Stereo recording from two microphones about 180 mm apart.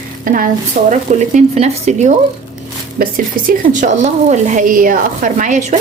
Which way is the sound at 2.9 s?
55° right (ahead or behind).